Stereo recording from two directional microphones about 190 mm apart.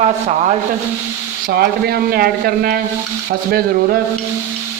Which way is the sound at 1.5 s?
55° right (ahead or behind).